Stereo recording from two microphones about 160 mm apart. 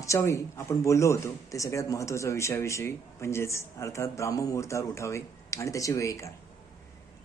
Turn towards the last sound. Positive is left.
turn(degrees=20)  # may be behind; listen again after turning